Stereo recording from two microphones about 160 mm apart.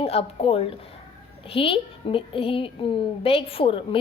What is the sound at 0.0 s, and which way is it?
A woman's voice, 40° left (ahead or behind).